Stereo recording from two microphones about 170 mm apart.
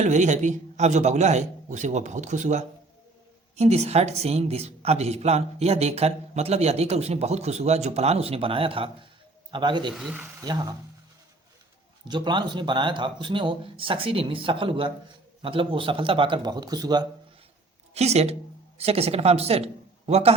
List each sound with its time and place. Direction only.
0.0 s a man's voice: 45° right (ahead or behind); by 9.9 s 25° right (ahead or behind)
9.9 s speech: 5° right (ahead or behind)
10.4 s speech: 25° right (ahead or behind)
12.0 s speech: 25° right (ahead or behind)
17.9 s speech: 40° right (ahead or behind)